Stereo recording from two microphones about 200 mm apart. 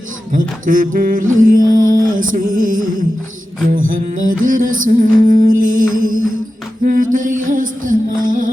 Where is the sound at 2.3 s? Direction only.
45° right (ahead or behind).